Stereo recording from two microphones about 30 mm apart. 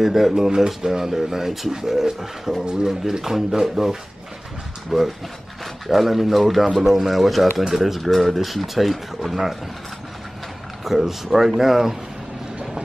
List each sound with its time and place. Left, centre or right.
0.0 s speech: centre
4.9 s speech: centre
7.6 s speech: centre
8.0 s speech: centre
10.8 s speech: centre